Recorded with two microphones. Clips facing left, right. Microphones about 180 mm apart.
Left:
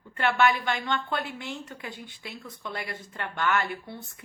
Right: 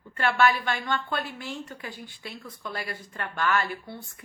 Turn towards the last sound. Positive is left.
turn(degrees=20)  # may be behind; listen again after turning